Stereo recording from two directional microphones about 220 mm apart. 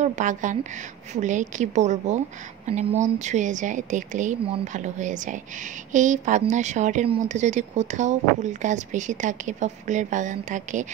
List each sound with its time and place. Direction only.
0.0 s a woman's voice: 35° right (ahead or behind)